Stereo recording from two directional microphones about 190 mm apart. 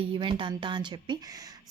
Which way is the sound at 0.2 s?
25° right (ahead or behind).